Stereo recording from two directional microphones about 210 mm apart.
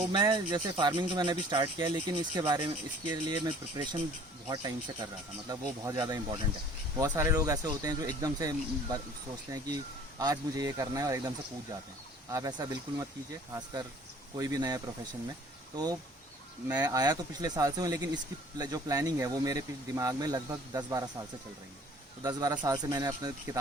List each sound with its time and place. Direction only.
0.1 s speech: 20° right (ahead or behind)
12.3 s speech: 20° right (ahead or behind)
14.3 s speech: 15° right (ahead or behind)
22.2 s speech: 20° right (ahead or behind)